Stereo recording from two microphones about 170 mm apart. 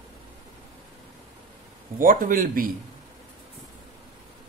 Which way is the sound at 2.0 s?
50° right (ahead or behind).